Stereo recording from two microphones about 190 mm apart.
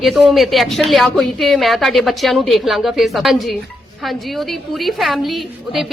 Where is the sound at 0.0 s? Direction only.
Centre (ahead or behind).